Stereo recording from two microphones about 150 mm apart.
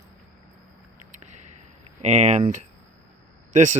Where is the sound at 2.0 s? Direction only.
50° right (ahead or behind).